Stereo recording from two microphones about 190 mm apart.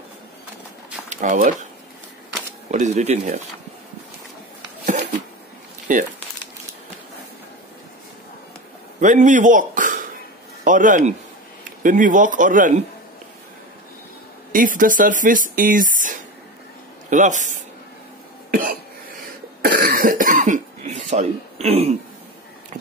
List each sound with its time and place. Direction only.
1.1 s speech: 40° right (ahead or behind)
2.7 s speech: 40° right (ahead or behind)
5.9 s speech: 40° right (ahead or behind)
9.0 s speech: 40° right (ahead or behind)
14.5 s speech: 45° right (ahead or behind)
18.5 s cough: 50° right (ahead or behind); by 21.9 s 35° right (ahead or behind)